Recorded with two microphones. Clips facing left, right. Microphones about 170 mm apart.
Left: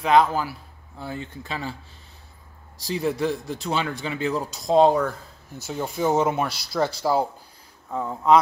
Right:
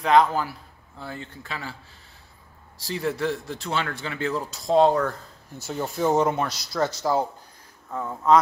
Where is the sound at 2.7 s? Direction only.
15° left (ahead or behind).